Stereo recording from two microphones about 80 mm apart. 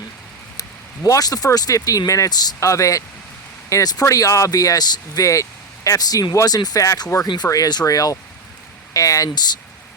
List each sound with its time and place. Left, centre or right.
1.0 s speech: left